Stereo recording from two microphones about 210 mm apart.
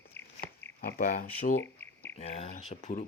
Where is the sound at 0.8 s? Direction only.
40° left (ahead or behind).